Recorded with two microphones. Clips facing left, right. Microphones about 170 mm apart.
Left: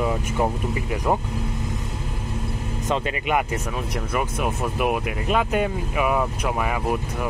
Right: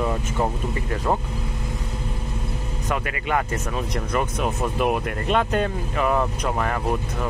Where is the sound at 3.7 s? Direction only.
5° left (ahead or behind).